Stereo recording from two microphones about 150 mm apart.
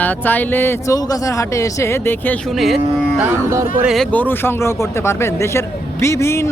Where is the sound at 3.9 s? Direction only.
10° left (ahead or behind).